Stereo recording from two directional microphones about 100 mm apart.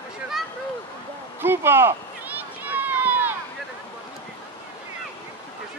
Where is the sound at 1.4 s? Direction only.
20° right (ahead or behind).